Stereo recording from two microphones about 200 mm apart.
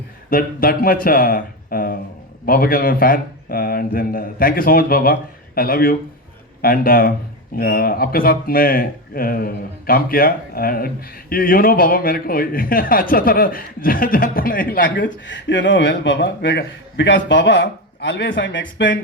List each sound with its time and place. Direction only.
0.3 s speech: 45° left (ahead or behind)
14.8 s a man's voice: 65° left (ahead or behind)